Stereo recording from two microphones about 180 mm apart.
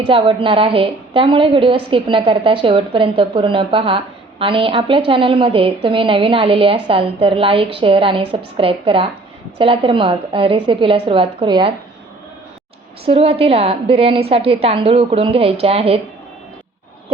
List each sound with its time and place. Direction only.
0.0 s a woman's voice: 30° right (ahead or behind)
13.1 s a woman's voice: 35° right (ahead or behind)